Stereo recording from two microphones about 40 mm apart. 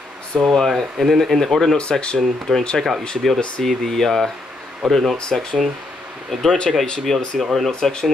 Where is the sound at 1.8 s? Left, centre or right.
Left.